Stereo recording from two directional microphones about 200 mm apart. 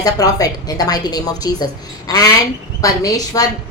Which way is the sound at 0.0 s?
20° left (ahead or behind).